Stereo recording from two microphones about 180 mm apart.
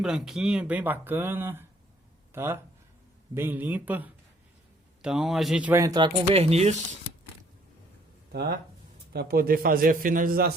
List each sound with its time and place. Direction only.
0.0 s speech: centre (ahead or behind); by 6.1 s 20° right (ahead or behind)
6.3 s speech: 35° right (ahead or behind)
8.3 s a man's voice: 60° right (ahead or behind)